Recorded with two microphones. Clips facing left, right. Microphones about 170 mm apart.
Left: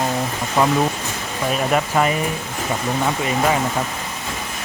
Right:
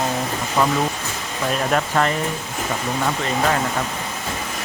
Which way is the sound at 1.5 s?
5° left (ahead or behind).